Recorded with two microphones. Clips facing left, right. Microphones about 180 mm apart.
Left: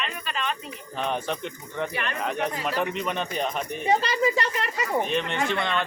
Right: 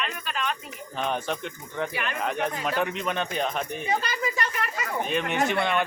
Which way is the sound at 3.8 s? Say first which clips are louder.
Left 8 dB; 30° left (ahead or behind).